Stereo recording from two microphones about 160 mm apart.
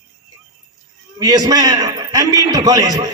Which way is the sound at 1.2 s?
20° right (ahead or behind).